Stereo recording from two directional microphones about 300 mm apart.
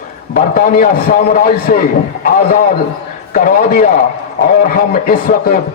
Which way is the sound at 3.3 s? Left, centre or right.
Left.